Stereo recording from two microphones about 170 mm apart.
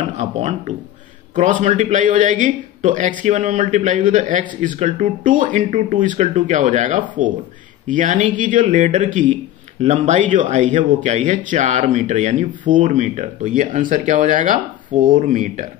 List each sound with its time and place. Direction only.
0.0 s speech: 40° right (ahead or behind)